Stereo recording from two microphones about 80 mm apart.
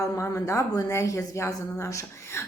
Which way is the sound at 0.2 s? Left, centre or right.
Left.